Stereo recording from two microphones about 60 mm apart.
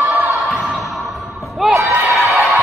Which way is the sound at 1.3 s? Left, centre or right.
Centre.